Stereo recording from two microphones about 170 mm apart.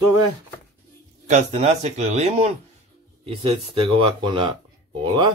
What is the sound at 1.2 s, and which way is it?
Speech, 40° right (ahead or behind).